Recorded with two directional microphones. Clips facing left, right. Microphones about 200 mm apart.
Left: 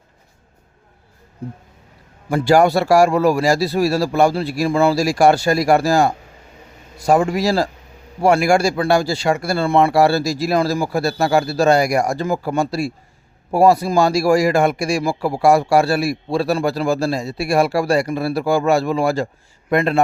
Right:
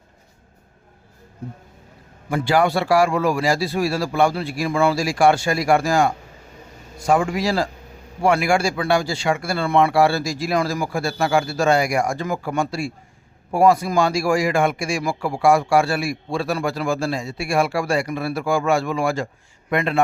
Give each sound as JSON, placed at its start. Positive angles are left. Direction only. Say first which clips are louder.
{"t": 2.3, "sound": "a man's voice", "louder": "left 5 dB", "side_deg": 40}